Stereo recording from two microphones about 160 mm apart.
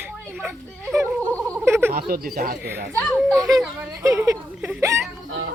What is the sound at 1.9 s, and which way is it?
Speech, 70° right (ahead or behind).